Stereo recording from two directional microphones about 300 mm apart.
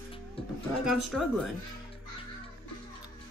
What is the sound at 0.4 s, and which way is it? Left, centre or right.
Speech, centre.